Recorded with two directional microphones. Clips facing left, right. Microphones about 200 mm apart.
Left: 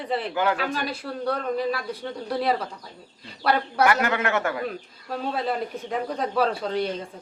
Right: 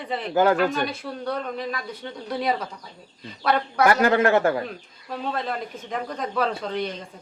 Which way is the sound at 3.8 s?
35° right (ahead or behind).